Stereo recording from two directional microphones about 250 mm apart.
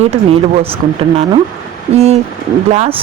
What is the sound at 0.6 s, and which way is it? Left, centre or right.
A man's voice, right.